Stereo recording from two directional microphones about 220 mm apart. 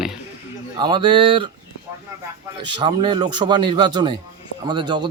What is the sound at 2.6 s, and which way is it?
Speech, 20° right (ahead or behind).